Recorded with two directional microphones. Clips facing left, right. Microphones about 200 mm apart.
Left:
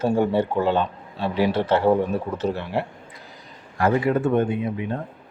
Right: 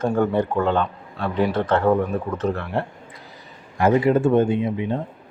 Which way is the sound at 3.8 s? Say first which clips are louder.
Right 3 dB; 20° right (ahead or behind).